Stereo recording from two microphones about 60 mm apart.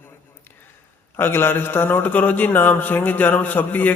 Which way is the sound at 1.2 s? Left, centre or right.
Left.